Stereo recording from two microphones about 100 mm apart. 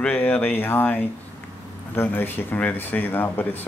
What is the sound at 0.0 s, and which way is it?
Speech, 20° left (ahead or behind).